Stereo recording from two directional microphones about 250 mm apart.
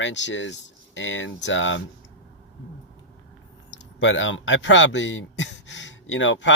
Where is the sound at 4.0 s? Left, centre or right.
Left.